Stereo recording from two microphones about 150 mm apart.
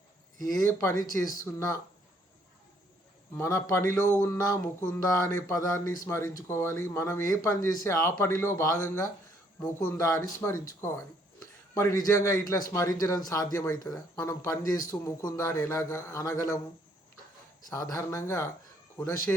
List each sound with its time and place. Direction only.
0.7 s speech: 15° left (ahead or behind)
3.3 s speech: 20° left (ahead or behind)
17.7 s speech: 25° left (ahead or behind)